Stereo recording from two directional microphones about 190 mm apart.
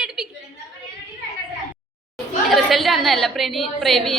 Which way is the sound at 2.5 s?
Centre (ahead or behind).